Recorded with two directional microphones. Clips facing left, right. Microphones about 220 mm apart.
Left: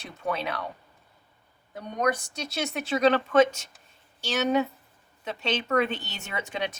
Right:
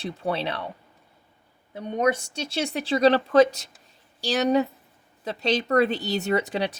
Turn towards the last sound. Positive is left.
turn(degrees=-35)  # may be behind; listen again after turning